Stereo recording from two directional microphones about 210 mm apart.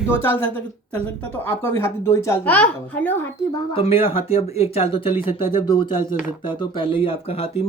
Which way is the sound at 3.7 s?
30° left (ahead or behind).